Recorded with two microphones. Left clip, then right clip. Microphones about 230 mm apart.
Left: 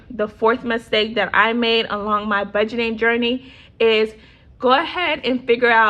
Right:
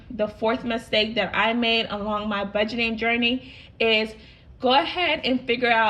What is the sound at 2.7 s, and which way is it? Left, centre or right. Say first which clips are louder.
Speech: left 3 dB; centre.